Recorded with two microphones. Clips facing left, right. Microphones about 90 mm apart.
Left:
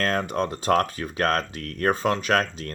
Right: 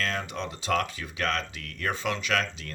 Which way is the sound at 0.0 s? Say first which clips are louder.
Left 7 dB; 45° left (ahead or behind).